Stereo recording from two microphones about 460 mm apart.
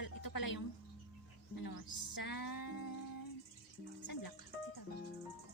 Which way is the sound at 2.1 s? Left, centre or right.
Left.